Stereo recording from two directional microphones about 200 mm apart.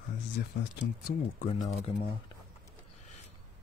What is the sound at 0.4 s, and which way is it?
Speech, 55° left (ahead or behind).